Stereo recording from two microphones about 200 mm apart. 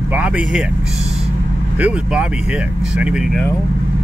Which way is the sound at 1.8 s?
5° right (ahead or behind).